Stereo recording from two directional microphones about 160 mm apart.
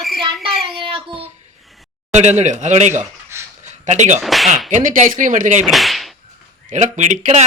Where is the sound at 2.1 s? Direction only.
45° right (ahead or behind).